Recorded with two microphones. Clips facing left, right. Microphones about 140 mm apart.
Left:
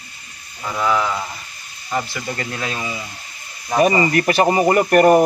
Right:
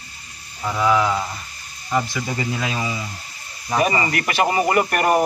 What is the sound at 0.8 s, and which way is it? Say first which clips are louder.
Speech: right 1 dB; 5° right (ahead or behind).